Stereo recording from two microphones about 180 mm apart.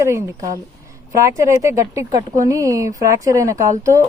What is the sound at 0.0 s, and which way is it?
A woman's voice, 15° right (ahead or behind).